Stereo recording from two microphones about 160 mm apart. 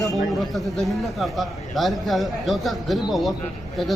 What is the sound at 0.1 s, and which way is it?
A man's voice, centre (ahead or behind).